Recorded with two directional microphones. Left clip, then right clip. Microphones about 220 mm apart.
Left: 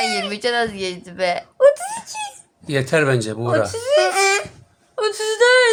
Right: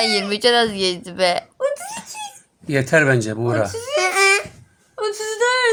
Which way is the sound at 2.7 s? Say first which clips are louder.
Right 2 dB; 10° right (ahead or behind).